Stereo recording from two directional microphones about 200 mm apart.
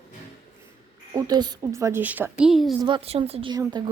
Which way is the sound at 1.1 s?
20° right (ahead or behind).